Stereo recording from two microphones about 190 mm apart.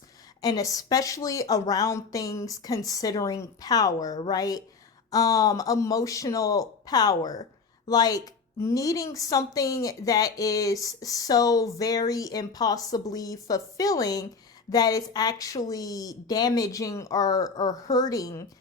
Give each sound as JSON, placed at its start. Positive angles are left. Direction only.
{"t": 0.4, "sound": "a woman's voice", "side_deg": 20}